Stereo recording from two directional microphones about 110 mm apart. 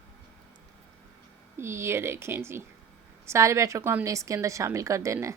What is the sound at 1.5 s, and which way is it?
A woman's voice, 25° right (ahead or behind).